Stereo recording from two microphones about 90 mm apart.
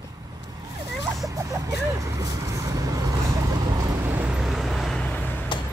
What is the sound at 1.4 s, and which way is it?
Vehicle, 35° right (ahead or behind).